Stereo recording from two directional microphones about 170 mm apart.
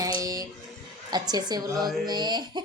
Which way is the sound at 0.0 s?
20° right (ahead or behind).